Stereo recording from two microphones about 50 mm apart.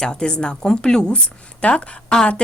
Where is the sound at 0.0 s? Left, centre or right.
Centre.